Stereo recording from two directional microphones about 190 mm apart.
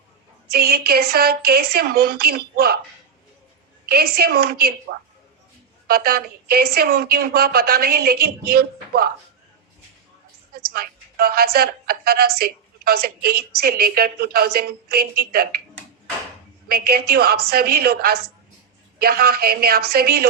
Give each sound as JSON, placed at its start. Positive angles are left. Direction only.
{"t": 0.5, "sound": "a woman's voice", "side_deg": -55}
{"t": 3.8, "sound": "a woman's voice", "side_deg": -55}
{"t": 10.5, "sound": "a woman's voice", "side_deg": -55}
{"t": 16.6, "sound": "a woman's voice", "side_deg": -55}